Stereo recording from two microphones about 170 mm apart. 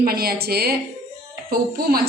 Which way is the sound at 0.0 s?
60° right (ahead or behind).